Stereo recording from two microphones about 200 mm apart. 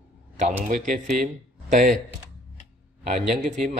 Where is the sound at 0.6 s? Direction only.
40° right (ahead or behind).